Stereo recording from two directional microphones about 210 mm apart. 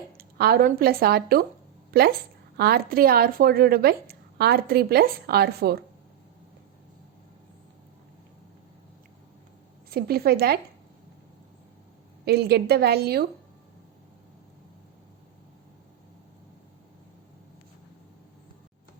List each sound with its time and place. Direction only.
0.2 s a woman's voice: 45° right (ahead or behind)
9.9 s a woman's voice: 45° right (ahead or behind)
12.2 s a woman's voice: 50° right (ahead or behind)